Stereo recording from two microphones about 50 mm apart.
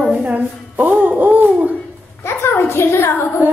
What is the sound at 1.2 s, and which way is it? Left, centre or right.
Hoot, right.